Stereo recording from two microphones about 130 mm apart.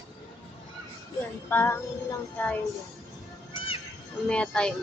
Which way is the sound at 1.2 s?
15° left (ahead or behind).